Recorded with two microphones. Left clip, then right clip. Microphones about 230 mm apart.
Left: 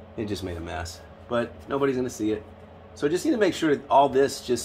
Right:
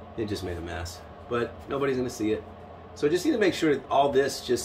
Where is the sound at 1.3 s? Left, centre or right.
Centre.